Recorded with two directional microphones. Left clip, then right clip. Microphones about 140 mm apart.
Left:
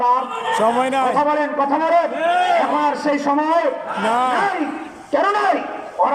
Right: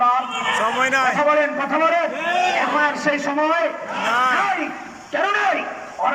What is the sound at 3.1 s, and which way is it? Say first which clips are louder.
Speech: left 1 dB; 40° left (ahead or behind).